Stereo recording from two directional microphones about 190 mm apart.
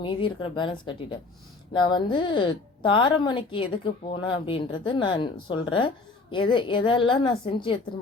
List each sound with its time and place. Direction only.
0.0 s speech: 25° left (ahead or behind)